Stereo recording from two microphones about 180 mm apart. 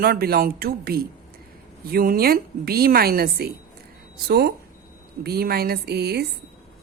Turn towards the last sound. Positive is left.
turn(degrees=-65)  # may be behind; listen again after turning